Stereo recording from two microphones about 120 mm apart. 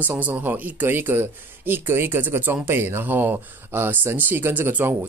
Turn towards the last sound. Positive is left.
turn(degrees=-20)  # may be behind; listen again after turning